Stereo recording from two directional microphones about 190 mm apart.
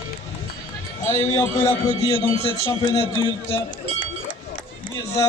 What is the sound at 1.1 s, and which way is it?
A man's voice, 15° left (ahead or behind).